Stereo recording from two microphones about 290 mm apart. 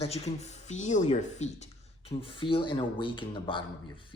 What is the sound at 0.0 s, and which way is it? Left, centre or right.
Speech, left.